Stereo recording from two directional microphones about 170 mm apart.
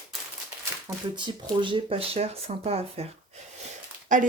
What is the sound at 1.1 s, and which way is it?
Speech, 30° right (ahead or behind).